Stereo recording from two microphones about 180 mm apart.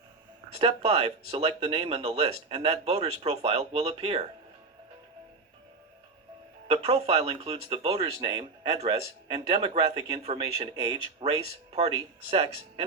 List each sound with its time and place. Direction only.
0.5 s speech: 35° right (ahead or behind)
6.7 s speech: 35° right (ahead or behind)